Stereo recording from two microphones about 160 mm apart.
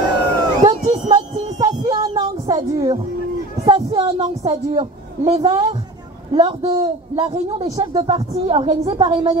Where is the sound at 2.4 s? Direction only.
20° right (ahead or behind).